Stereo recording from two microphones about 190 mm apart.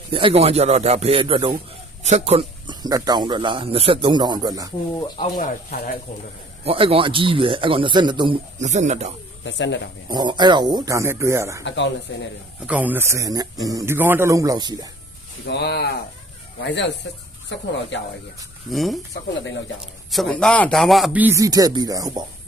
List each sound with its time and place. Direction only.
0.1 s speech: 30° right (ahead or behind)
5.2 s speech: 45° left (ahead or behind)
6.7 s speech: 30° right (ahead or behind)
8.5 s speech: 40° right (ahead or behind)
9.4 s speech: 70° left (ahead or behind)
10.1 s speech: 20° right (ahead or behind)
12.1 s speech: 85° left
12.6 s a man's voice: 10° right (ahead or behind)
15.4 s speech: 60° left (ahead or behind)
18.7 s speech: centre (ahead or behind)
20.1 s a man's voice: centre (ahead or behind); by 22.3 s 20° right (ahead or behind)